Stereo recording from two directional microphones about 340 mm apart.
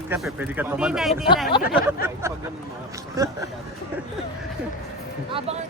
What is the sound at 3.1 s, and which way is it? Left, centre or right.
Speech, centre.